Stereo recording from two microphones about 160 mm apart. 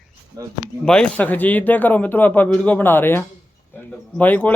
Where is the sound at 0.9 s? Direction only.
5° left (ahead or behind).